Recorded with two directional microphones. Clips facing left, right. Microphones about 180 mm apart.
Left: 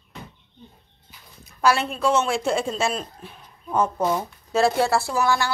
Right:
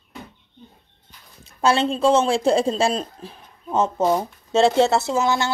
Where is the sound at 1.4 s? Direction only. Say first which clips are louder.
Right 2 dB; 25° right (ahead or behind).